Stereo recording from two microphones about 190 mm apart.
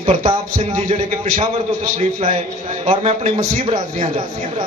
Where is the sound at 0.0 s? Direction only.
30° right (ahead or behind).